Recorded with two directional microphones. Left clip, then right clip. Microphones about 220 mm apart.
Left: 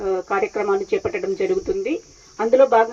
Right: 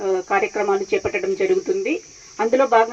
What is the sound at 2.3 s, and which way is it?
Speech, 45° right (ahead or behind).